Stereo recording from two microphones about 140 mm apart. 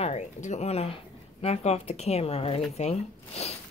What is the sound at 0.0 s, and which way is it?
Speech, 55° left (ahead or behind).